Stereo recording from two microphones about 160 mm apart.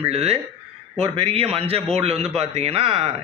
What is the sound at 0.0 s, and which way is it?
A man's voice, 40° right (ahead or behind).